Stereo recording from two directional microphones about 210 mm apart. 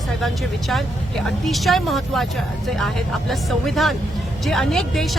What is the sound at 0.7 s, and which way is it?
Speech, centre (ahead or behind).